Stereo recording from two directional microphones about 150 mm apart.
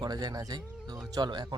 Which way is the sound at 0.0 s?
25° right (ahead or behind).